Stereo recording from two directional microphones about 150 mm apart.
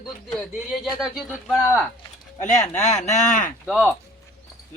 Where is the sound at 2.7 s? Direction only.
50° left (ahead or behind).